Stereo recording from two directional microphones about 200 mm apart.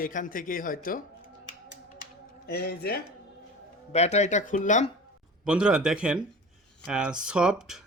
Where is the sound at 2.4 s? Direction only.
55° left (ahead or behind).